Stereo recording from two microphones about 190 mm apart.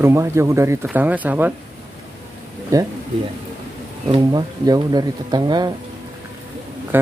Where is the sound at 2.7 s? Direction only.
20° right (ahead or behind).